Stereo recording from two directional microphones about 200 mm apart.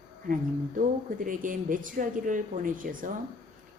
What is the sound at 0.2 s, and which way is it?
A woman's voice, 45° right (ahead or behind).